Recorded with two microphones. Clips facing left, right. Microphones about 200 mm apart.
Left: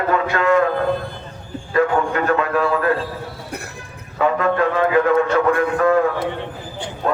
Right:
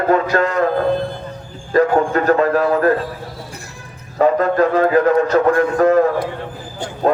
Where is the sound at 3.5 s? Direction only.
60° left (ahead or behind).